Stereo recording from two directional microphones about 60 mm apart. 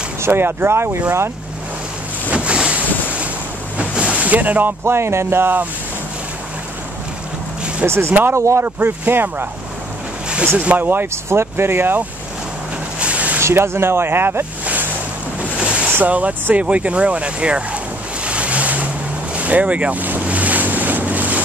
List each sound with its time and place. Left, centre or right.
0.2 s speech: right
2.3 s boat: centre
3.7 s ocean: centre
4.8 s speech: right
7.8 s speech: right
8.6 s speech: right
10.8 s speech: right
11.2 s speech: right
13.0 s a sound: right
13.4 s speech: right
15.5 s boat: centre
15.9 s speech: right
18.2 s ocean: centre
19.3 s boat: right